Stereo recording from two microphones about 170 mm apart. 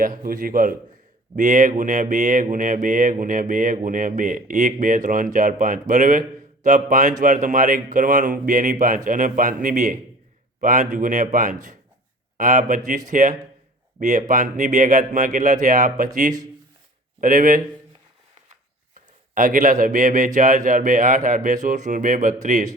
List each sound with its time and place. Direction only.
0.0 s mantra: 55° right (ahead or behind)
5.9 s a man's voice: 50° right (ahead or behind)
7.2 s mantra: 50° right (ahead or behind)
17.2 s mantra: 50° right (ahead or behind)
18.9 s a man's voice: 50° right (ahead or behind)
20.7 s mantra: 50° right (ahead or behind)